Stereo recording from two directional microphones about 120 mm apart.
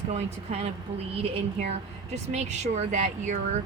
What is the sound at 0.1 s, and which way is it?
Speech, 65° right (ahead or behind).